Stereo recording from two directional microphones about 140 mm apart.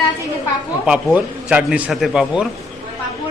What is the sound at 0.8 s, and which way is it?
A man's voice, 10° right (ahead or behind).